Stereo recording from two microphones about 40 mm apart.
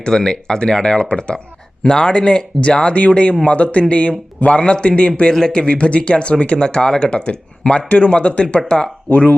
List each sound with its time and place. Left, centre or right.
0.0 s speech: centre
9.0 s speech: left